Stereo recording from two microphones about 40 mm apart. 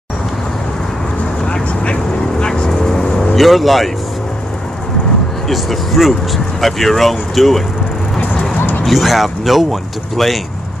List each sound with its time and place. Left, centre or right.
1.4 s vehicle: left
3.3 s speech: centre
5.5 s speech: centre
8.5 s music: left
8.8 s speech: centre